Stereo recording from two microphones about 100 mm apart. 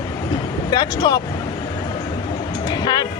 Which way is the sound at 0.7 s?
45° left (ahead or behind).